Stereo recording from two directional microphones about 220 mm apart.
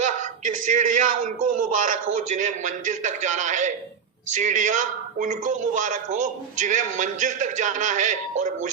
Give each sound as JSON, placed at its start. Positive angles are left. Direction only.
{"t": 0.1, "sound": "a man's voice", "side_deg": -35}